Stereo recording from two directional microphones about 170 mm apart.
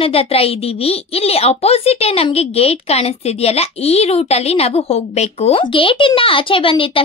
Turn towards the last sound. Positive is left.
turn(degrees=30)  # may be behind; listen again after turning